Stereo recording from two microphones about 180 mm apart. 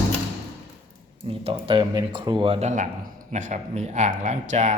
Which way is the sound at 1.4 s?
30° right (ahead or behind).